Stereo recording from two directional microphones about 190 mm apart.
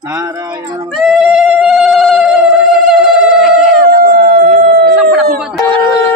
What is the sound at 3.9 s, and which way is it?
Howl, 55° right (ahead or behind).